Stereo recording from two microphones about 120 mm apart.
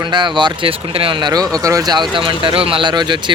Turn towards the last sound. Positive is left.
turn(degrees=-40)  # may be behind; listen again after turning